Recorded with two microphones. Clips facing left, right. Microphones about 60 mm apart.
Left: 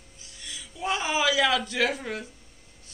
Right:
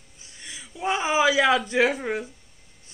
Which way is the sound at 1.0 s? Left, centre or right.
Centre.